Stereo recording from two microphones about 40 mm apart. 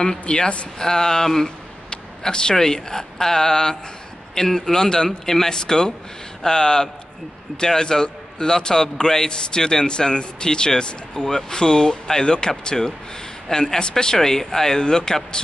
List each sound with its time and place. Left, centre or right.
0.2 s speech: left
0.7 s a man's voice: centre